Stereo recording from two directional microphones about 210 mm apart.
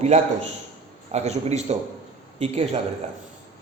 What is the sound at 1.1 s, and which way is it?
A man's voice, 30° right (ahead or behind).